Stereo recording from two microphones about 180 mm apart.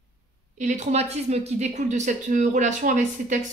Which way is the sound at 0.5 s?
40° right (ahead or behind).